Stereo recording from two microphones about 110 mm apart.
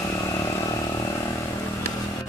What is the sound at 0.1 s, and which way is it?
Vehicle, 30° left (ahead or behind).